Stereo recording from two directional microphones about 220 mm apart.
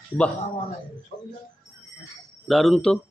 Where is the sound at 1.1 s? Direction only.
20° left (ahead or behind).